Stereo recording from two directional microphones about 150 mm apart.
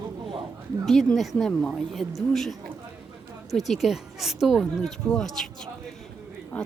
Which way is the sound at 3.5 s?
Centre (ahead or behind).